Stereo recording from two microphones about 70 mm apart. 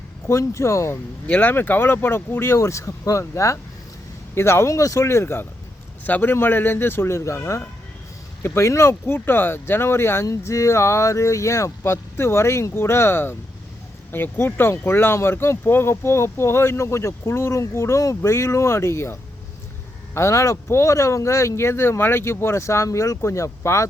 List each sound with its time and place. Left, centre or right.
0.3 s speech: left
1.3 s speech: left
6.1 s speech: left
10.2 s speech: left
20.1 s speech: left